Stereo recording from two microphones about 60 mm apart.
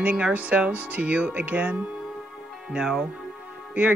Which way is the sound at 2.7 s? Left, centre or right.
Centre.